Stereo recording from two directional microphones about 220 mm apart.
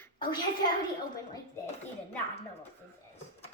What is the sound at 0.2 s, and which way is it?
Speech, 20° left (ahead or behind).